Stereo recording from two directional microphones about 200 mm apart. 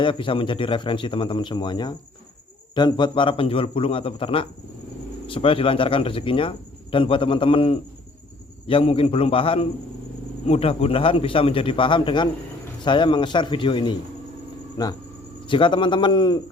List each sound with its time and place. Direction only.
0.0 s speech: 25° left (ahead or behind)